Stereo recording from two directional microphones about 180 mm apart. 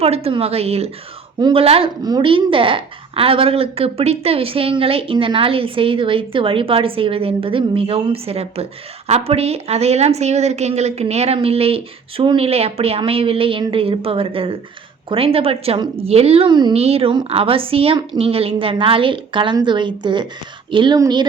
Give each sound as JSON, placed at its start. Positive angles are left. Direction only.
{"t": 0.0, "sound": "a woman's voice", "side_deg": -35}